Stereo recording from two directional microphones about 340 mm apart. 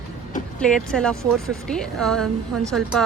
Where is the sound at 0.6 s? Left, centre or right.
Centre.